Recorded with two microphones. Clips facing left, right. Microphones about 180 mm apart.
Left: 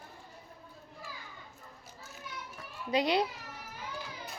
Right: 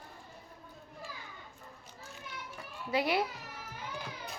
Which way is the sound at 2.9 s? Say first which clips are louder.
Left 2 dB; 20° left (ahead or behind).